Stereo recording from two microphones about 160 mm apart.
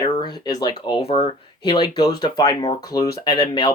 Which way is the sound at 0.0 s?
30° left (ahead or behind).